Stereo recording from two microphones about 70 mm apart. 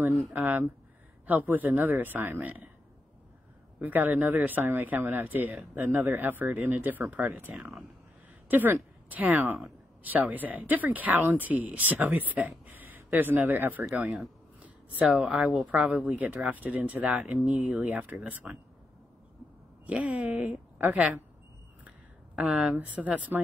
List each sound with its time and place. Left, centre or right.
0.3 s a woman's voice: right
3.8 s a woman's voice: right
14.0 s speech: centre
15.6 s a woman's voice: centre
19.9 s a woman's voice: right